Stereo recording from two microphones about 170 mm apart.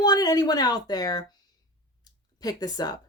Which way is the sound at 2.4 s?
20° left (ahead or behind).